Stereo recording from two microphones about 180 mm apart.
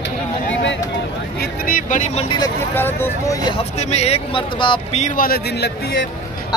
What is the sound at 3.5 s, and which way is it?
Speech, 35° left (ahead or behind).